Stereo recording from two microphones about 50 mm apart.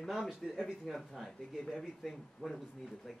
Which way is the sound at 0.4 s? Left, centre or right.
Centre.